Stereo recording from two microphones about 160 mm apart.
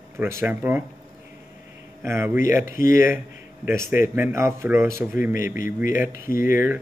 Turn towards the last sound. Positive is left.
turn(degrees=-15)  # may be behind; listen again after turning